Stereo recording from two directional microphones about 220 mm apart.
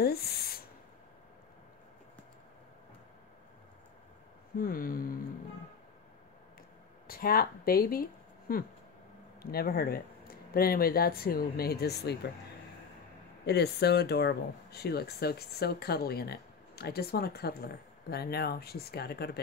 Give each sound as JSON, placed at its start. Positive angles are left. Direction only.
{"t": 0.0, "sound": "a sound", "side_deg": 45}
{"t": 4.6, "sound": "speech", "side_deg": 40}
{"t": 7.1, "sound": "speech", "side_deg": 40}
{"t": 13.5, "sound": "speech", "side_deg": 50}